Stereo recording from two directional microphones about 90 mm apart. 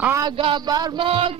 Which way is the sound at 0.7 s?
45° right (ahead or behind).